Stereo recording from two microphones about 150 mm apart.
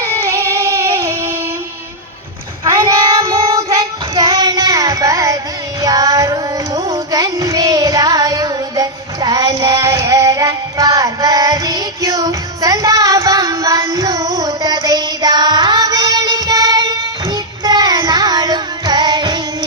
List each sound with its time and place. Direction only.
0.0 s child singing: 20° right (ahead or behind)
2.6 s child singing: 20° right (ahead or behind)